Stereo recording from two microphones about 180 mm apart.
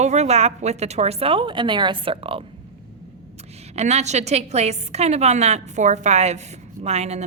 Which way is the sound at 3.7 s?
35° right (ahead or behind).